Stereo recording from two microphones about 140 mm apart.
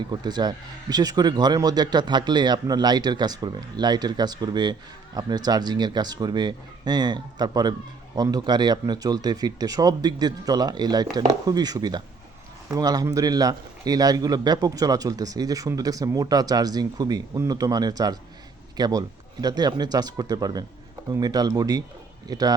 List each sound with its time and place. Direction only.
0.0 s a man's voice: 30° right (ahead or behind)